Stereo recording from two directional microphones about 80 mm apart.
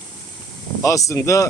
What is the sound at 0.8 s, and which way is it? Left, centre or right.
Speech, left.